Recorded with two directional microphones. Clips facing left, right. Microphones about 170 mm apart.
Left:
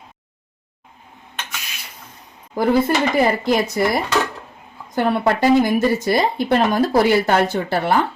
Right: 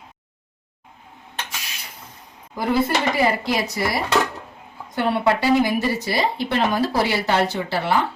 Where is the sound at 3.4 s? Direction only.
50° left (ahead or behind).